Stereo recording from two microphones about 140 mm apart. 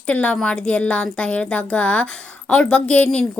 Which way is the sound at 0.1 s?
10° left (ahead or behind).